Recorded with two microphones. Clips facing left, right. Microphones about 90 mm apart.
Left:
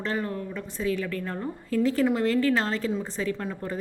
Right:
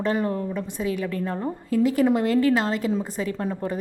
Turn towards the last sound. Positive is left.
turn(degrees=-30)  # may be behind; listen again after turning